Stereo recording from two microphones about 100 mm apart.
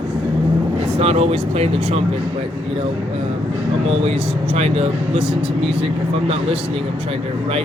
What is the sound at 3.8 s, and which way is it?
Speech, 80° right.